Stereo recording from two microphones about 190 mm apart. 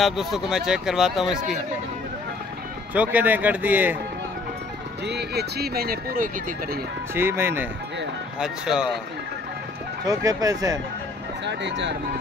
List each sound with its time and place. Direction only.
0.0 s speech: centre (ahead or behind)
2.9 s speech: 10° right (ahead or behind)
5.0 s speech: 60° right (ahead or behind)
7.2 s speech: 10° right (ahead or behind)
10.0 s speech: 20° right (ahead or behind)
11.4 s speech: 70° right (ahead or behind)